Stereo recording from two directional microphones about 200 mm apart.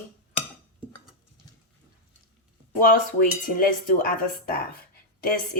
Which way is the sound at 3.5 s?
45° left (ahead or behind).